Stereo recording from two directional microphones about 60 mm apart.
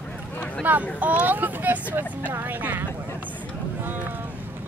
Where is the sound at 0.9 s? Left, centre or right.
Right.